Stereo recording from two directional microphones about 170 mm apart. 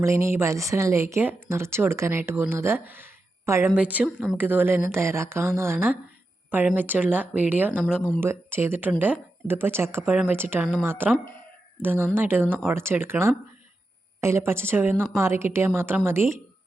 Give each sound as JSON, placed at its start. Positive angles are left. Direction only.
{"t": 0.0, "sound": "speech", "side_deg": -15}